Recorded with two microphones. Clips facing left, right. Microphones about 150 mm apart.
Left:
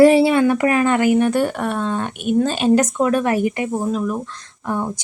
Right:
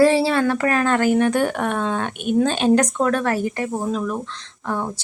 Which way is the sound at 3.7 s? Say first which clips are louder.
Left 2 dB; centre (ahead or behind).